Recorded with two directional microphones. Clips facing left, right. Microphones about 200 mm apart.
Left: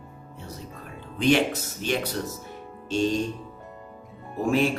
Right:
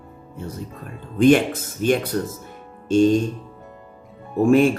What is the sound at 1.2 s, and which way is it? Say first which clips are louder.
Mantra: right 7 dB; 50° right (ahead or behind).